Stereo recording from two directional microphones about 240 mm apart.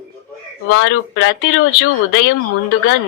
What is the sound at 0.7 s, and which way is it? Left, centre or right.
Speech, left.